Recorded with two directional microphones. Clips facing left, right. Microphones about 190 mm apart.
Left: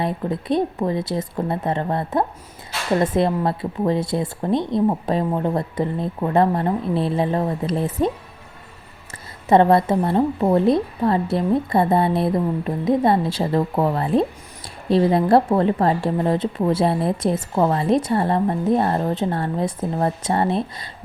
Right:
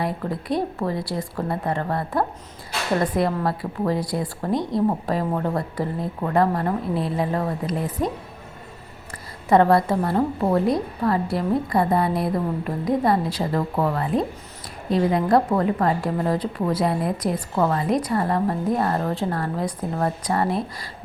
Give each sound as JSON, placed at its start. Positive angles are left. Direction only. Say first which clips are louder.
{"t": 0.0, "sound": "a woman's voice", "louder": "left 3 dB", "side_deg": 20}
{"t": 9.5, "sound": "a woman's voice", "louder": "left 2 dB", "side_deg": 20}